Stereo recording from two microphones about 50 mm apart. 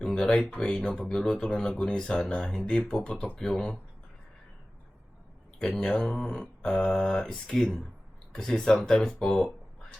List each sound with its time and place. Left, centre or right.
0.0 s speech: centre
5.5 s speech: centre